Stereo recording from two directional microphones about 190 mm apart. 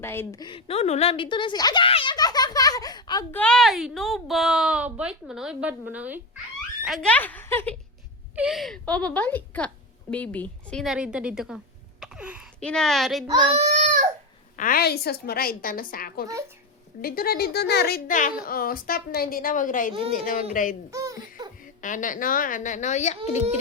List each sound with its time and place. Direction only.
0.0 s a woman's voice: 10° left (ahead or behind)
3.3 s a woman's voice: 5° left (ahead or behind)
6.8 s speech: centre (ahead or behind)
8.4 s a woman's voice: centre (ahead or behind)
13.6 s baby cry: 40° right (ahead or behind)
14.5 s a woman's voice: 45° left (ahead or behind)
20.9 s baby laughter: 15° right (ahead or behind)
21.8 s a woman's voice: 45° left (ahead or behind)